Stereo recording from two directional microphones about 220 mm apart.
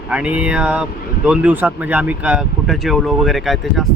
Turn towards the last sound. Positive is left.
turn(degrees=0)  # may be behind; listen again after turning